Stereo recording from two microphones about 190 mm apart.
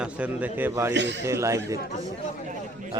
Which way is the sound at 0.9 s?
70° right (ahead or behind).